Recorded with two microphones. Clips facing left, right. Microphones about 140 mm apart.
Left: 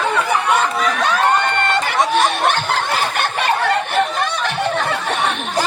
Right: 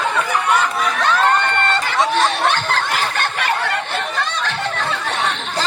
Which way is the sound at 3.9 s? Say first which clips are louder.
Left 5 dB; 15° left (ahead or behind).